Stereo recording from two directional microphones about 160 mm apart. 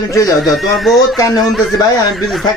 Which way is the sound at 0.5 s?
Centre (ahead or behind).